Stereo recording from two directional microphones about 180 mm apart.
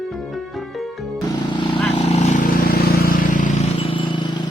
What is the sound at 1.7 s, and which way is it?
Vehicle, 40° left (ahead or behind).